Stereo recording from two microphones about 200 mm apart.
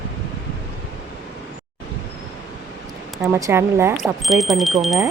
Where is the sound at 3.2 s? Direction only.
15° right (ahead or behind).